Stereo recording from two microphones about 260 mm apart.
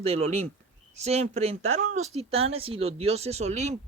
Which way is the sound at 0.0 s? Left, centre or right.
Right.